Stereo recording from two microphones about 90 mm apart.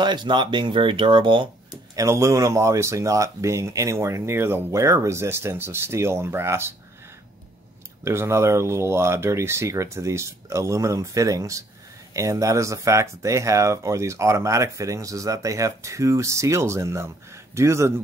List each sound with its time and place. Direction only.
0.0 s speech: 55° right (ahead or behind)
2.0 s speech: 35° right (ahead or behind)
8.0 s speech: 30° right (ahead or behind)